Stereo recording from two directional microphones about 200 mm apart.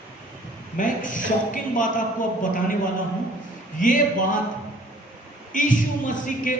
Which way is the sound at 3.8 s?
40° left (ahead or behind).